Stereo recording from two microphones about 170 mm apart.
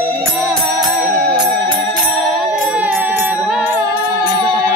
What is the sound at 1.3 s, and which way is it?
Music, 25° right (ahead or behind).